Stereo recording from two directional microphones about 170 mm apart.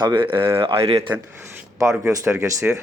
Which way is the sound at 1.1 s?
10° right (ahead or behind).